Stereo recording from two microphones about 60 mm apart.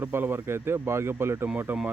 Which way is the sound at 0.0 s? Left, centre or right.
Right.